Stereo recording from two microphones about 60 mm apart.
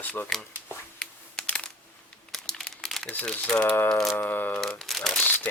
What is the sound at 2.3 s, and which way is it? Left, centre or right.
Crumpling, centre.